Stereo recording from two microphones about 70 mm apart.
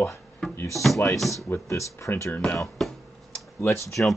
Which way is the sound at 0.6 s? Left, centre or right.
Left.